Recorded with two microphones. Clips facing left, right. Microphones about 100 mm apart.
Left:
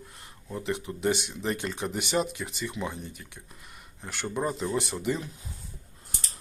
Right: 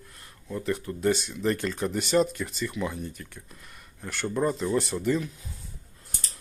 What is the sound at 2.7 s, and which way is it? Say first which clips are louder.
Speech: right 3 dB; 25° left (ahead or behind).